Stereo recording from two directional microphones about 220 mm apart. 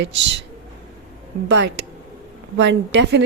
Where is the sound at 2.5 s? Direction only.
55° right (ahead or behind).